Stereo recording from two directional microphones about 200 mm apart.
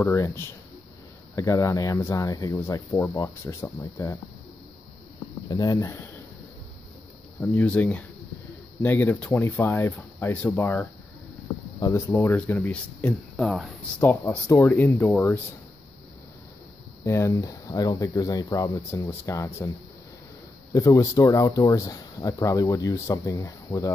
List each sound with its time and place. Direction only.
0.0 s speech: 10° left (ahead or behind)
5.5 s speech: 20° left (ahead or behind)
7.5 s speech: 5° left (ahead or behind)
17.0 s speech: 15° left (ahead or behind)
20.7 s speech: 15° left (ahead or behind)